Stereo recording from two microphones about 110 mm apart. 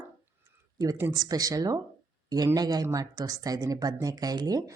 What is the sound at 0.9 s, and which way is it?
Speech, 25° right (ahead or behind).